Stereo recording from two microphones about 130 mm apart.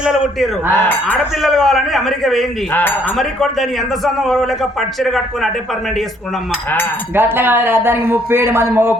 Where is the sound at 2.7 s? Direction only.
15° left (ahead or behind).